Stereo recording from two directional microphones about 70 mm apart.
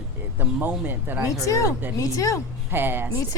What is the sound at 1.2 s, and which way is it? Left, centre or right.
A woman's voice, left.